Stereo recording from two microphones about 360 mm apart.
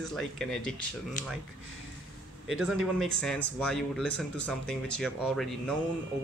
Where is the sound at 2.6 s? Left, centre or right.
Centre.